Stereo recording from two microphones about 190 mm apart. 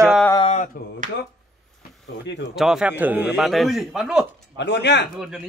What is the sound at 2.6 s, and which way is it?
A man's voice, 5° right (ahead or behind).